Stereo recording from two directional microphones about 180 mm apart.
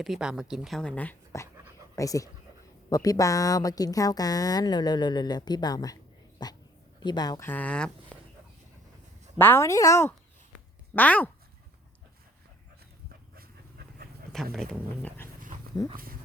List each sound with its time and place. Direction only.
0.0 s a woman's voice: 5° right (ahead or behind)
9.4 s speech: 15° left (ahead or behind)
13.3 s dog: 55° right (ahead or behind)
14.5 s speech: 5° left (ahead or behind)